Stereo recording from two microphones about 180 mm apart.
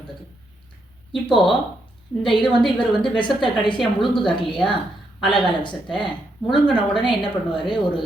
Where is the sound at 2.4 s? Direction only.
5° left (ahead or behind).